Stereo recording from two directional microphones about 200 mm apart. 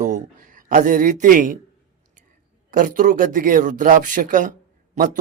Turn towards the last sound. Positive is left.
turn(degrees=-40)  # may be behind; listen again after turning